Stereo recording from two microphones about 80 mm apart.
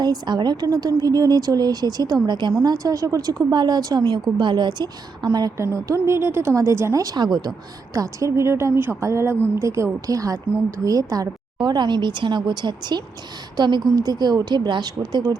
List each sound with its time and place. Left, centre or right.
0.0 s speech: right
2.2 s speech: right
2.6 s speech: right
3.5 s speech: right
5.3 s speech: right
5.7 s a woman's voice: right
7.9 s a woman's voice: right
11.6 s speech: right
13.9 s speech: right